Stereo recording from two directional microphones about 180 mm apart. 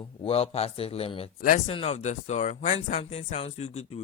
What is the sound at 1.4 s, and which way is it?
Speech, 50° left (ahead or behind).